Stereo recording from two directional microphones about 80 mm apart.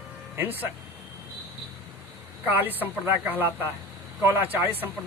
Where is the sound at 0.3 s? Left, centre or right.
Right.